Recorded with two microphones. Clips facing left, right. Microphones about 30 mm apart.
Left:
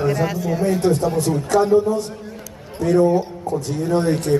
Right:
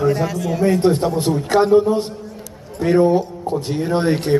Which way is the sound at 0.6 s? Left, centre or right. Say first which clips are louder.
Right 3 dB; right.